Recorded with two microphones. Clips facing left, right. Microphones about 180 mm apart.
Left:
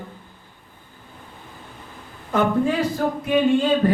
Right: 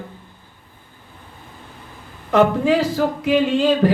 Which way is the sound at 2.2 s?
90° right.